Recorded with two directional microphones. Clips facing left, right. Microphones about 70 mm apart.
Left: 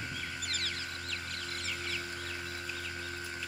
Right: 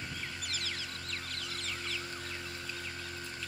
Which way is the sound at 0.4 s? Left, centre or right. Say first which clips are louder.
Left 2 dB; left.